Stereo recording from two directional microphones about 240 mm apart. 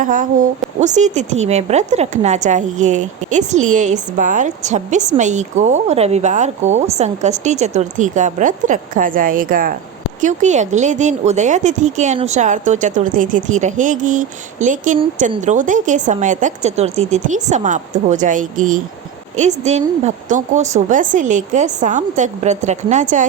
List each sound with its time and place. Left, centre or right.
0.0 s a woman's voice: right